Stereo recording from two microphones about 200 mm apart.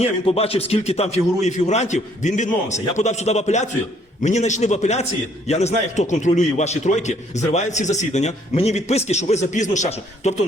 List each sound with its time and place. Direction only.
0.0 s a man's voice: 30° left (ahead or behind)